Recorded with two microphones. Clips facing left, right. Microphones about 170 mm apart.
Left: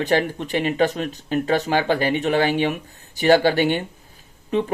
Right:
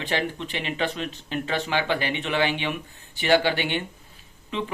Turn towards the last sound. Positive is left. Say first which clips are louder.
# left 8 dB
turn(degrees=45)  # may be behind; listen again after turning